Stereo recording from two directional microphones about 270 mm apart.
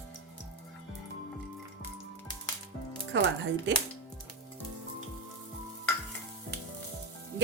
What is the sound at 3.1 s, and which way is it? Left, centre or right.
Speech, right.